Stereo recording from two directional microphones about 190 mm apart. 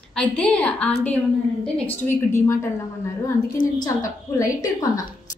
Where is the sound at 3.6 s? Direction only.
90° left.